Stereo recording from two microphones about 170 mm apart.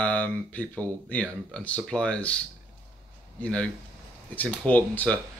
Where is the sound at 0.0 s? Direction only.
5° left (ahead or behind).